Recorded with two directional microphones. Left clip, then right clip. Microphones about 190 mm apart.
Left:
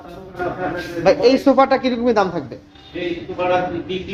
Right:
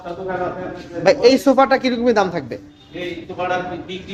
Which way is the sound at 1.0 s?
25° right (ahead or behind).